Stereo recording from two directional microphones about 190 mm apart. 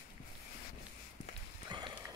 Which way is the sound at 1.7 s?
25° right (ahead or behind).